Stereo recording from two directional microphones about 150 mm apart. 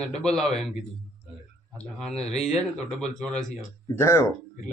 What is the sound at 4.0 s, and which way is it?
Speech, 20° left (ahead or behind).